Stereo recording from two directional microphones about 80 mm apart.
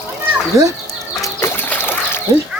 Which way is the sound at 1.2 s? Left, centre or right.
Left.